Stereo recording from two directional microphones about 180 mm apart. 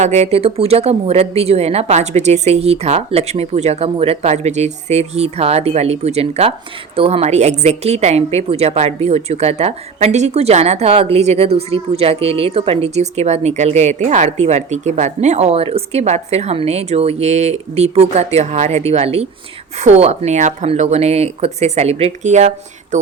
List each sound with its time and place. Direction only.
0.0 s a woman's voice: 40° right (ahead or behind)